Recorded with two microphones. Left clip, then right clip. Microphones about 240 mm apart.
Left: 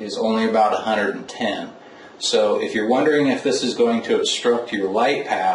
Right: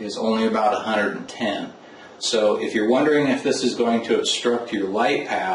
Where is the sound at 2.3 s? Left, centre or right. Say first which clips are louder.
Left 1 dB; centre.